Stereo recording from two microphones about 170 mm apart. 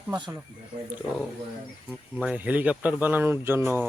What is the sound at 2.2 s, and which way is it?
Speech, 5° right (ahead or behind).